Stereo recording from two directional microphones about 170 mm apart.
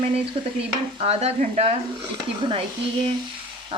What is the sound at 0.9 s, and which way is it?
Speech, 35° right (ahead or behind).